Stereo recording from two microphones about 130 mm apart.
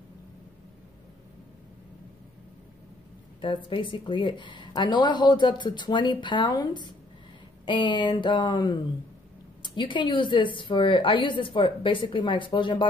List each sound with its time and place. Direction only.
3.3 s a woman's voice: 40° left (ahead or behind)